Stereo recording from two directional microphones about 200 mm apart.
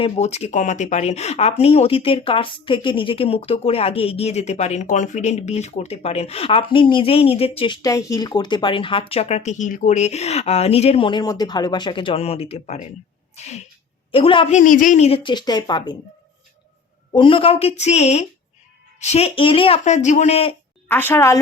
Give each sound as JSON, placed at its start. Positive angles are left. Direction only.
{"t": 0.0, "sound": "speech", "side_deg": 35}
{"t": 14.6, "sound": "speech", "side_deg": 40}
{"t": 17.1, "sound": "speech", "side_deg": 25}
{"t": 20.8, "sound": "a woman's voice", "side_deg": 10}